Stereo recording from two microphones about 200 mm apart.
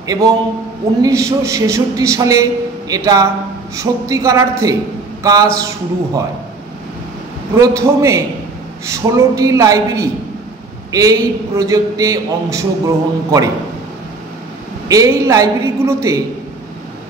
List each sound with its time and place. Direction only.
0.0 s a man's voice: 15° right (ahead or behind)
7.5 s a man's voice: 15° right (ahead or behind)
14.9 s a man's voice: 15° right (ahead or behind)